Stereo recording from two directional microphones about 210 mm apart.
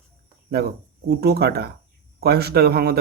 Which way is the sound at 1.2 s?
50° right (ahead or behind).